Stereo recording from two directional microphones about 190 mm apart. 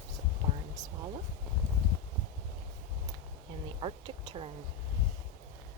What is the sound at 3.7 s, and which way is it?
Speech, 25° right (ahead or behind).